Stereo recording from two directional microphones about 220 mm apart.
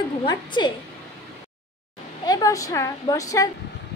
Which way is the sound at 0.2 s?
20° left (ahead or behind).